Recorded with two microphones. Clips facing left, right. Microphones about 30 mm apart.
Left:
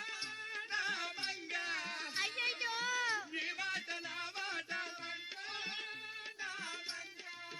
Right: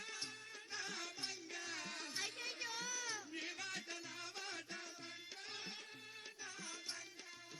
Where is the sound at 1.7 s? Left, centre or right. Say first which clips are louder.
Left 6 dB; left.